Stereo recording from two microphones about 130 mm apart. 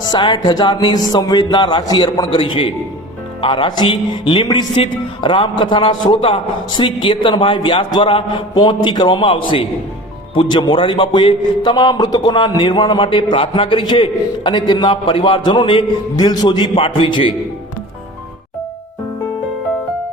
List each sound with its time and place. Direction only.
0.0 s speech: 35° left (ahead or behind)
2.3 s speech: 40° left (ahead or behind)